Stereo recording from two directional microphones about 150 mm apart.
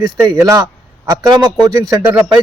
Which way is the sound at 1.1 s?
25° right (ahead or behind).